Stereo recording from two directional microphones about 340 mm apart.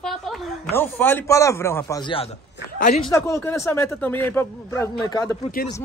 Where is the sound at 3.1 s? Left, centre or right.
Centre.